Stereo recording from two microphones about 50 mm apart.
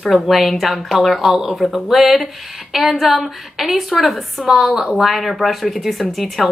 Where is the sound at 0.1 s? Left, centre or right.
Centre.